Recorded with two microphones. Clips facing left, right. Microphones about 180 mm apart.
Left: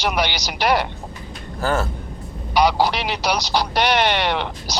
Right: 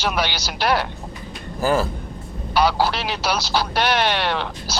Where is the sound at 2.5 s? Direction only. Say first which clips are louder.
Left 1 dB; 15° left (ahead or behind).